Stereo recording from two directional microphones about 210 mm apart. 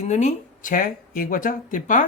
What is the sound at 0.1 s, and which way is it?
Speech, 35° left (ahead or behind).